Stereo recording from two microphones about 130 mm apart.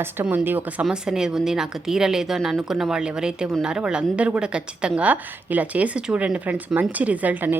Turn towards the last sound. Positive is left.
turn(degrees=-15)  # may be behind; listen again after turning